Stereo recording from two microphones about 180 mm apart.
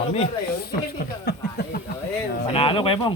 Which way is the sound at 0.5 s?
55° left (ahead or behind).